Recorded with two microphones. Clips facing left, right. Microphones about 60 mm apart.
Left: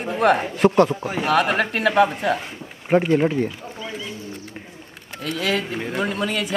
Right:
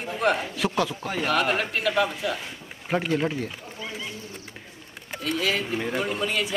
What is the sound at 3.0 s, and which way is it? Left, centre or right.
Speech, centre.